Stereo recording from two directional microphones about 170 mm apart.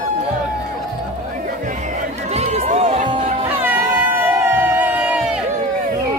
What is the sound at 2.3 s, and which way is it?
Run, 40° right (ahead or behind).